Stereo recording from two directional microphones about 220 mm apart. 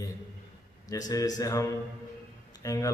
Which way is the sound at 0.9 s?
15° left (ahead or behind).